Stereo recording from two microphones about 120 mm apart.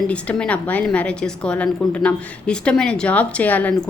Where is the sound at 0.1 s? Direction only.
10° left (ahead or behind).